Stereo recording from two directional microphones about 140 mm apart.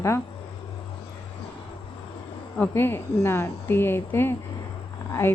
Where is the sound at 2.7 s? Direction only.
15° left (ahead or behind).